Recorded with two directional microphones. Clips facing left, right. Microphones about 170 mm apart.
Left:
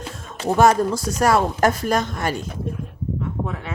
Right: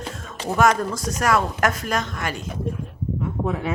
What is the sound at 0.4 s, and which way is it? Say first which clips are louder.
Speech: left 3 dB; 30° left (ahead or behind).